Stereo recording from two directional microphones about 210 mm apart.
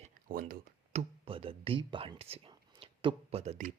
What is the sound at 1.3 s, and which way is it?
Speech, 25° right (ahead or behind).